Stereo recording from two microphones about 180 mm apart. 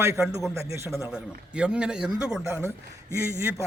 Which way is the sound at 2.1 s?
15° right (ahead or behind).